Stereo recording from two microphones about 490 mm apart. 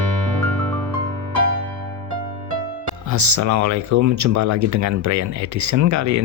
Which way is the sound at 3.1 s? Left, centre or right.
Right.